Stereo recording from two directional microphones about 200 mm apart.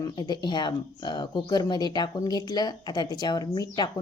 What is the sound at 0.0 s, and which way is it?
Speech, 20° left (ahead or behind).